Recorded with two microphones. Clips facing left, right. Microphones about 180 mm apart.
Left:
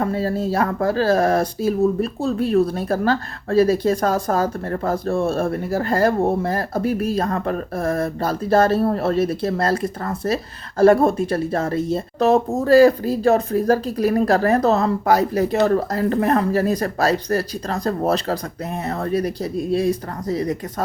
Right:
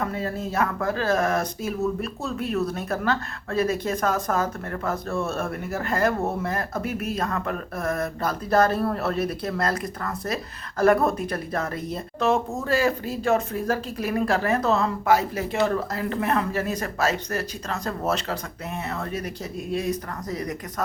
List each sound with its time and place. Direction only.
0.0 s speech: 35° left (ahead or behind)